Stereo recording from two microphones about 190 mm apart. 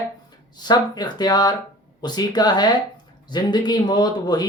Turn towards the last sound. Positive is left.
turn(degrees=20)  # may be behind; listen again after turning